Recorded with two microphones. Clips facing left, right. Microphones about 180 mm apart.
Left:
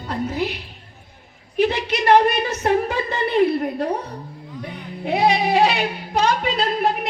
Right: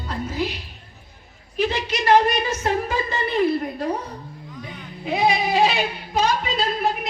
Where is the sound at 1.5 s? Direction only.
60° left (ahead or behind).